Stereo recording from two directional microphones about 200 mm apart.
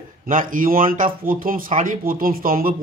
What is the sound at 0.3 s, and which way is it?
A man's voice, 45° right (ahead or behind).